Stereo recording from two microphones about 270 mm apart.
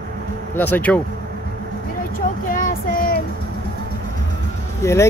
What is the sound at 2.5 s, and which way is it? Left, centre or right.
Child singing, left.